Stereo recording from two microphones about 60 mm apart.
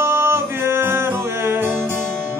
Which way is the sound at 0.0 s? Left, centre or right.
Right.